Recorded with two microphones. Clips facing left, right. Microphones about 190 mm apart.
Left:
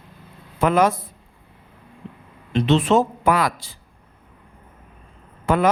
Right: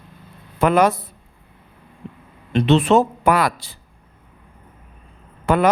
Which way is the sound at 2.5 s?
60° right (ahead or behind).